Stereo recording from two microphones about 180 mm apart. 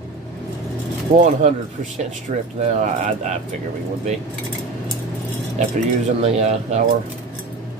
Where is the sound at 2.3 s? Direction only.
40° right (ahead or behind).